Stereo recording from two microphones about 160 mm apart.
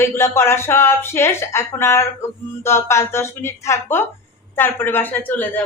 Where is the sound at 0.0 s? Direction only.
15° left (ahead or behind).